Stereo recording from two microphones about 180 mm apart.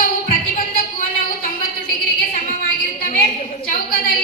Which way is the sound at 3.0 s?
55° left (ahead or behind).